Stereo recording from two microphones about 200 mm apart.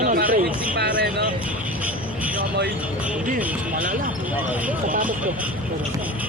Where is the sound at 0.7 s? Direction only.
55° right (ahead or behind).